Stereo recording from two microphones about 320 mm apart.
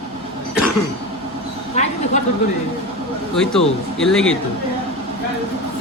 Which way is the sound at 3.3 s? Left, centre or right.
Centre.